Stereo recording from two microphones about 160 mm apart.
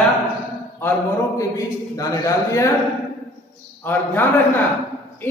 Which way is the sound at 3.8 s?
10° left (ahead or behind).